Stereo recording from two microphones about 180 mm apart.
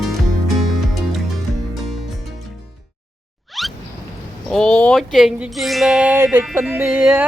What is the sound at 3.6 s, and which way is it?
Rodents, centre (ahead or behind).